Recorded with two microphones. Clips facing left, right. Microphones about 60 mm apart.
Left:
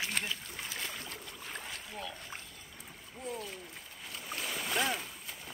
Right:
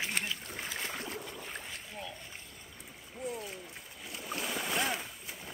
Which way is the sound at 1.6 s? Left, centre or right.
Centre.